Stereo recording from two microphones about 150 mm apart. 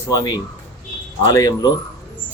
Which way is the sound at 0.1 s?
25° left (ahead or behind).